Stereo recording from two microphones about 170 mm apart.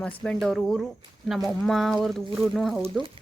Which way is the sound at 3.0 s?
30° right (ahead or behind).